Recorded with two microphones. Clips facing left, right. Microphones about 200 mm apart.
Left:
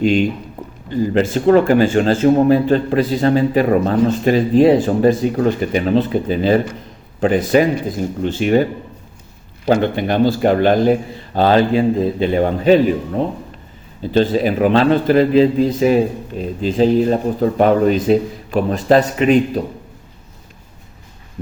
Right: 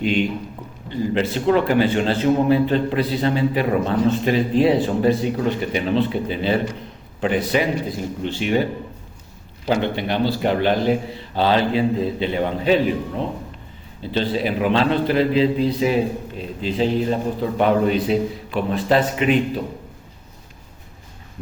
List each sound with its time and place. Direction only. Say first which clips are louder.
0.9 s a man's voice: left 5 dB; 45° left (ahead or behind)
9.6 s a man's voice: left 5 dB; 50° left (ahead or behind)
14.1 s a man's voice: left 7 dB; 45° left (ahead or behind)